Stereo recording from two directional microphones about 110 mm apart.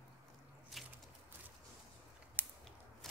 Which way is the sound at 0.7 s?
5° right (ahead or behind).